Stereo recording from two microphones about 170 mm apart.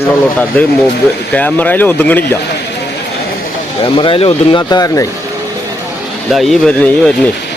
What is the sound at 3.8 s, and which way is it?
Speech, 30° left (ahead or behind).